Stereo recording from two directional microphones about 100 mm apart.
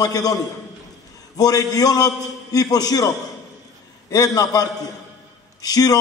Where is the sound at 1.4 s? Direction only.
40° left (ahead or behind).